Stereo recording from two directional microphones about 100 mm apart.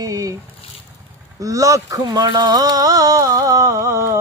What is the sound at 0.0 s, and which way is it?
Speech, 35° right (ahead or behind).